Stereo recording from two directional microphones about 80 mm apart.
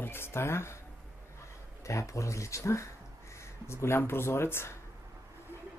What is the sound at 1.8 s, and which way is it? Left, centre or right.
Speech, left.